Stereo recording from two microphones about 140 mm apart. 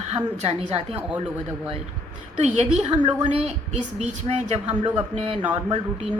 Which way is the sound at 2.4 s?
55° right (ahead or behind).